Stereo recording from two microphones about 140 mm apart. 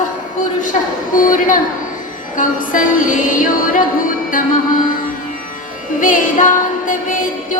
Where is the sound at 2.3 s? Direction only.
70° left (ahead or behind).